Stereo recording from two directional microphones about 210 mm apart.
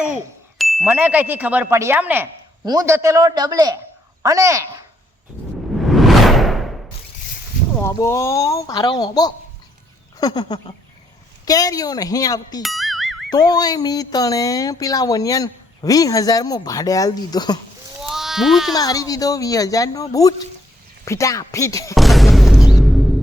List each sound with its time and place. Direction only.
0.6 s speech: centre (ahead or behind)
5.8 s whoosh: centre (ahead or behind)
7.8 s speech: 15° left (ahead or behind)
12.6 s music: centre (ahead or behind)
13.3 s speech: 20° left (ahead or behind)
18.0 s a sound: centre (ahead or behind)
18.7 s speech: 15° left (ahead or behind)
21.9 s music: centre (ahead or behind)